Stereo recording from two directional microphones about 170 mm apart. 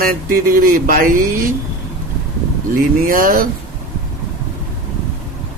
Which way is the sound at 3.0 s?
55° right (ahead or behind).